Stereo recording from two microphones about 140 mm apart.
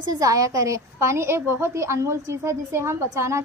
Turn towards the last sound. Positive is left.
turn(degrees=-20)  # may be behind; listen again after turning